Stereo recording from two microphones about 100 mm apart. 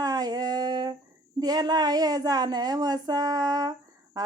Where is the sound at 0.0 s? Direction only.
40° right (ahead or behind).